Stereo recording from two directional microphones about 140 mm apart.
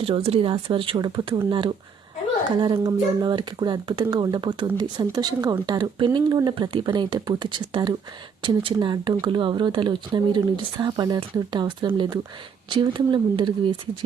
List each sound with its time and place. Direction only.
0.0 s speech: 45° right (ahead or behind)